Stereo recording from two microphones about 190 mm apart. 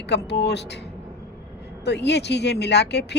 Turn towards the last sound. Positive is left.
turn(degrees=65)  # may be behind; listen again after turning